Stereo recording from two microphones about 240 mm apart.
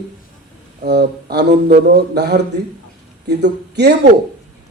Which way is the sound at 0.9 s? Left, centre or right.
Right.